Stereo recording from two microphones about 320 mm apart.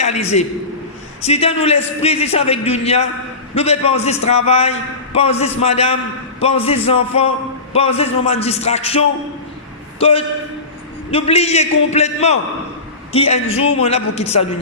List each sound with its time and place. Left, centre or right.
0.0 s a man's voice: left